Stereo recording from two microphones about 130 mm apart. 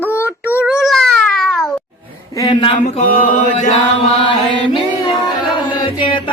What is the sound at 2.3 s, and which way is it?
Speech, 25° left (ahead or behind).